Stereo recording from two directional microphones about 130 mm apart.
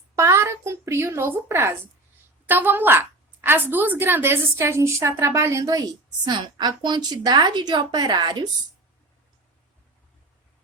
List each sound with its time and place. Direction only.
0.2 s a woman's voice: 20° right (ahead or behind)